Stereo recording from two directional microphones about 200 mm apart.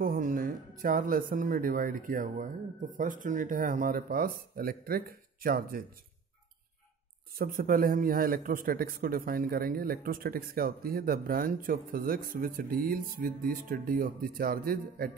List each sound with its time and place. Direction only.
0.0 s a man's voice: 45° right (ahead or behind)
7.3 s a man's voice: 45° right (ahead or behind)